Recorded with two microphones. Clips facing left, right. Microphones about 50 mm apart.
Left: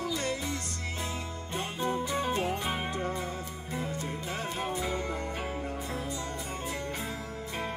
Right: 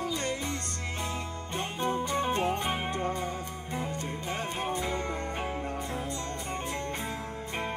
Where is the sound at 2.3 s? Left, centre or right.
Right.